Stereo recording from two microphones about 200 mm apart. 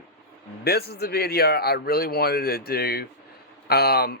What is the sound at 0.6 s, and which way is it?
Speech, 50° left (ahead or behind).